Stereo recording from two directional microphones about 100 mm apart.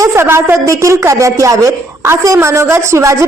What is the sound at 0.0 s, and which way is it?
A woman's voice, 25° right (ahead or behind).